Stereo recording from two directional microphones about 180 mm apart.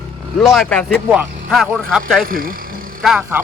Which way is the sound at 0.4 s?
Centre (ahead or behind).